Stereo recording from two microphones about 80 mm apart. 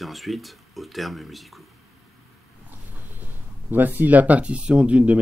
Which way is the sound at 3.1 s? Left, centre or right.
Right.